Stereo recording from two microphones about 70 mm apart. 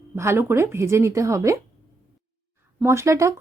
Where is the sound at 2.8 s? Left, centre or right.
Right.